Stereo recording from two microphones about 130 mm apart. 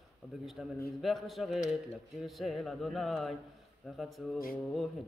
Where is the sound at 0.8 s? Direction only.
Centre (ahead or behind).